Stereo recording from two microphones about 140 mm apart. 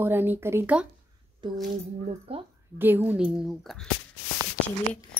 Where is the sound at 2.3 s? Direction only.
45° right (ahead or behind).